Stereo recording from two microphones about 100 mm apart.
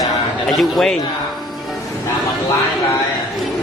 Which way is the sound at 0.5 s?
Centre (ahead or behind).